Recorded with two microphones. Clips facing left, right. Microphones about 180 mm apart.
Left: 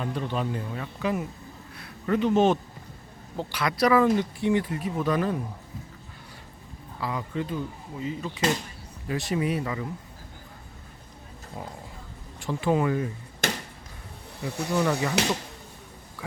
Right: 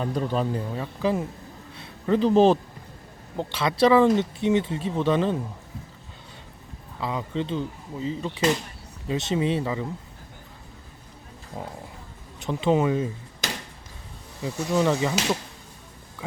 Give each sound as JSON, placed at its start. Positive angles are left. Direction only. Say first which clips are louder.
{"t": 0.0, "sound": "speech", "louder": "right 4 dB", "side_deg": -40}
{"t": 7.0, "sound": "speech", "louder": "right 2 dB", "side_deg": -20}
{"t": 11.6, "sound": "speech", "louder": "right 3 dB", "side_deg": -25}
{"t": 13.4, "sound": "a sound", "louder": "left 3 dB", "side_deg": 55}
{"t": 14.4, "sound": "speech", "louder": "right 3 dB", "side_deg": -20}